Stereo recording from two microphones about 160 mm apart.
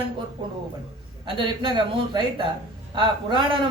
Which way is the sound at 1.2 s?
30° right (ahead or behind).